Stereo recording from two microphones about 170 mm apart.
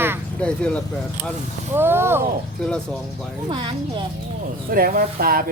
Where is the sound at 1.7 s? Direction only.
15° right (ahead or behind).